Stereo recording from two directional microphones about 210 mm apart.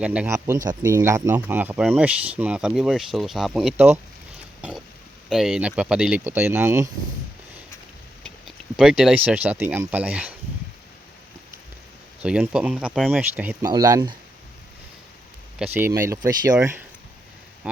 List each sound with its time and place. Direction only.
0.0 s speech: 5° right (ahead or behind)
5.3 s speech: centre (ahead or behind)
8.2 s speech: centre (ahead or behind)
12.2 s speech: 5° right (ahead or behind)
15.5 s speech: 10° right (ahead or behind)